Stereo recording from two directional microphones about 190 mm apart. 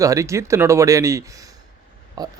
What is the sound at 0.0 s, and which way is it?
Speech, 15° right (ahead or behind).